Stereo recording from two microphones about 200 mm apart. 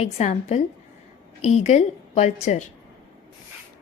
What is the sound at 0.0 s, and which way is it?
Speech, 35° left (ahead or behind).